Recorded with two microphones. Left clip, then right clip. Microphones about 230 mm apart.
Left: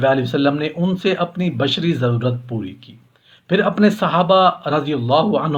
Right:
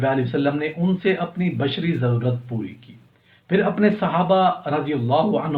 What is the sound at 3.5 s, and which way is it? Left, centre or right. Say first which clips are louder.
Speech: left 3 dB; left.